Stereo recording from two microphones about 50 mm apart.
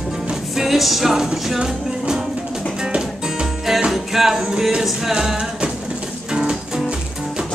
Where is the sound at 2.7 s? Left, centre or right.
Centre.